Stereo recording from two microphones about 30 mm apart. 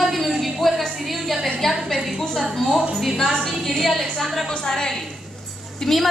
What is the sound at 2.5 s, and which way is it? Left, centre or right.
A woman's voice, centre.